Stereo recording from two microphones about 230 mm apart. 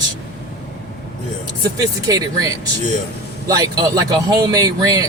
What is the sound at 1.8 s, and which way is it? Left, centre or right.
Speech, centre.